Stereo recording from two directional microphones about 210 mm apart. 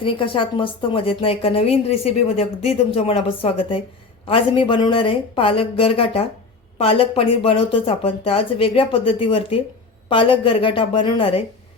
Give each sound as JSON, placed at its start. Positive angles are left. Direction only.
{"t": 0.0, "sound": "a woman's voice", "side_deg": 25}